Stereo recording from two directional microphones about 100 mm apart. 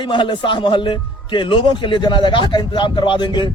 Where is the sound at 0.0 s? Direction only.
55° left (ahead or behind).